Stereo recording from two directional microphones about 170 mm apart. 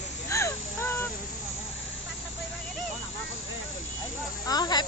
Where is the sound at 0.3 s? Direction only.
15° left (ahead or behind).